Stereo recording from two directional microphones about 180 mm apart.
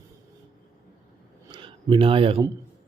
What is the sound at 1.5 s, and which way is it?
Speech, 25° right (ahead or behind).